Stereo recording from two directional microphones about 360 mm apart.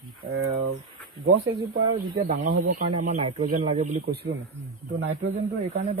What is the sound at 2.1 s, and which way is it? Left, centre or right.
Speech, centre.